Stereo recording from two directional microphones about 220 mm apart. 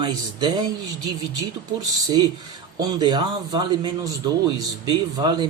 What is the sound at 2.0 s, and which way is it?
A man's voice, 20° right (ahead or behind).